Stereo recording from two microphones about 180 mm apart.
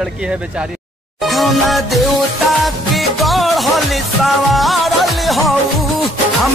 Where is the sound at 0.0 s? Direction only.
5° right (ahead or behind).